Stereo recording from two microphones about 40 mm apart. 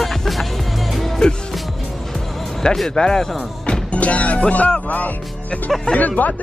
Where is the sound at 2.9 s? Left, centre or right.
Centre.